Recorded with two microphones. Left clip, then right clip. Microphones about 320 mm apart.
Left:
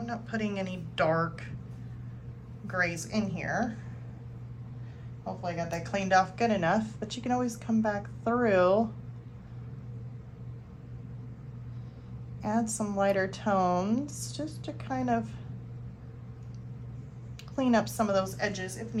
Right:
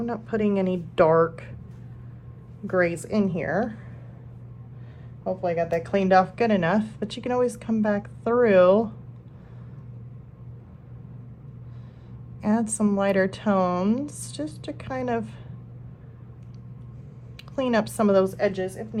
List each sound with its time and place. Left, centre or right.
0.0 s a woman's voice: centre
2.6 s a woman's voice: centre
5.2 s speech: right
12.5 s speech: right
17.6 s speech: right